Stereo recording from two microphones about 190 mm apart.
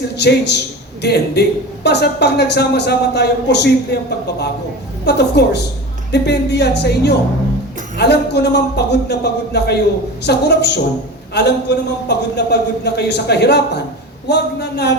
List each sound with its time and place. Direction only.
0.2 s a woman's voice: 60° left (ahead or behind)